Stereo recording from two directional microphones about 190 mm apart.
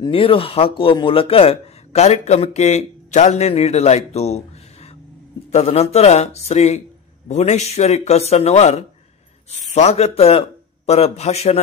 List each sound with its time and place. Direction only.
0.0 s speech: 30° left (ahead or behind)
5.5 s speech: 35° left (ahead or behind)